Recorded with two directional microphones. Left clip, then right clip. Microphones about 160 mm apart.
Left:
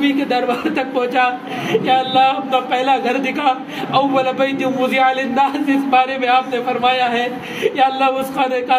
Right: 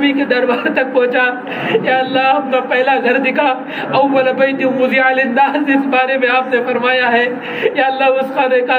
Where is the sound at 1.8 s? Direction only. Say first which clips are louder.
Left 1 dB; 45° left (ahead or behind).